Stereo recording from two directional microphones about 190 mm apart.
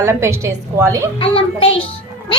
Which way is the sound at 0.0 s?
15° right (ahead or behind).